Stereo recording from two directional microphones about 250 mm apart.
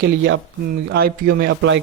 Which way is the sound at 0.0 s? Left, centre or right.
Right.